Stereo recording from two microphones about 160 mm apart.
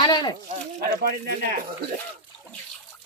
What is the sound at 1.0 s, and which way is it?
Speech, 75° right (ahead or behind).